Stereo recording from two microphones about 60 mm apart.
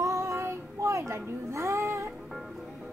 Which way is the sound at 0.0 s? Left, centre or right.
Right.